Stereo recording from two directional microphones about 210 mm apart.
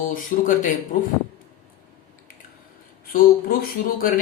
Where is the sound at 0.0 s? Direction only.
40° left (ahead or behind).